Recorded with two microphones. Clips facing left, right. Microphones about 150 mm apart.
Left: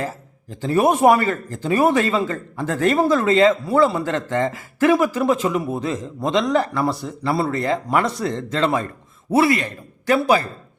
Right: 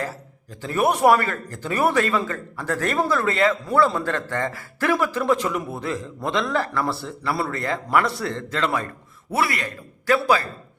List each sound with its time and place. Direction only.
0.8 s a man's voice: 20° left (ahead or behind)